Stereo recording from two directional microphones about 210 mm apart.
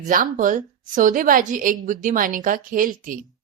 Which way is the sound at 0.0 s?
40° right (ahead or behind).